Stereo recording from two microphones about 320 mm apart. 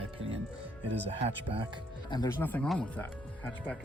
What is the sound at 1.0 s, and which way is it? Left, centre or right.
Speech, centre.